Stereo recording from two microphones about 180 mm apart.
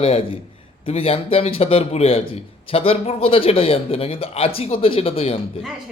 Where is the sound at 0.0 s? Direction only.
30° left (ahead or behind).